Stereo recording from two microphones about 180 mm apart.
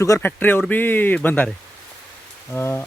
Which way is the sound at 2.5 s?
10° left (ahead or behind).